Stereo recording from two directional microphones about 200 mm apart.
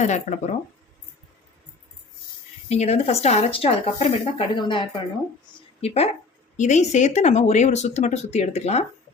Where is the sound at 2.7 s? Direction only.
35° left (ahead or behind).